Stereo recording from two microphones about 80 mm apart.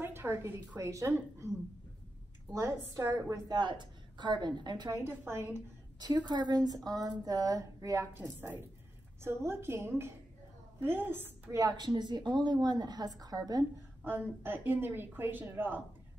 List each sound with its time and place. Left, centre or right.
0.0 s a woman's voice: right
2.6 s a woman's voice: right
3.5 s a woman's voice: right
4.9 s a woman's voice: right
5.9 s a woman's voice: right
8.1 s a woman's voice: right
11.5 s a woman's voice: right
14.0 s speech: right